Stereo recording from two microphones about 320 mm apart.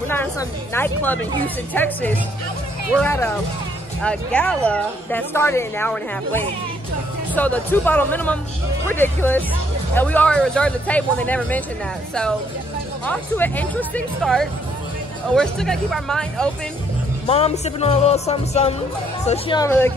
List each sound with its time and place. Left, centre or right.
0.1 s a woman's voice: centre
17.3 s music: centre
19.2 s a woman's voice: centre